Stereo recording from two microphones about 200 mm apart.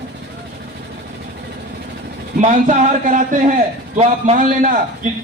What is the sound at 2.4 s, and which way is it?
A man's voice, 40° right (ahead or behind).